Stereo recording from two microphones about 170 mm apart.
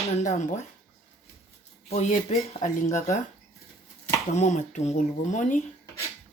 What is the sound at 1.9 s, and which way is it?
Speech, 40° left (ahead or behind).